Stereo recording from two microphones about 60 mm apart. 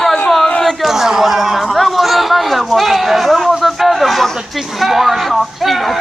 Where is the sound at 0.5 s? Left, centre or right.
Centre.